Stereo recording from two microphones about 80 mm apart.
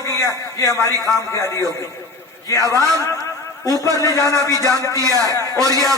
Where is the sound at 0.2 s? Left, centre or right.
Left.